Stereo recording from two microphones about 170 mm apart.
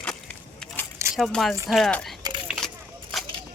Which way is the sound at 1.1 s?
Centre (ahead or behind).